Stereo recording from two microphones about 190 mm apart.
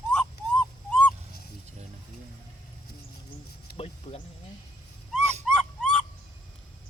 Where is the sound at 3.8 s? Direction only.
30° left (ahead or behind).